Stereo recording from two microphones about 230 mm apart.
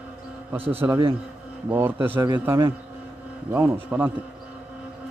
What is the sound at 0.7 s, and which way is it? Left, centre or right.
A man's voice, centre.